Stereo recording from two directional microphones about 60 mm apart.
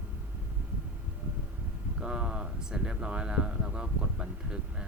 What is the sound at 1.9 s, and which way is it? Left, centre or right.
Speech, centre.